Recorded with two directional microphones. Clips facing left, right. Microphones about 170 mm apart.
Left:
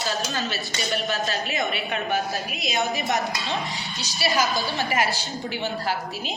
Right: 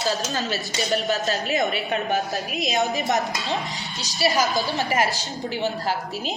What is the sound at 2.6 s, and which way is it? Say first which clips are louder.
Speech: right 5 dB; centre (ahead or behind).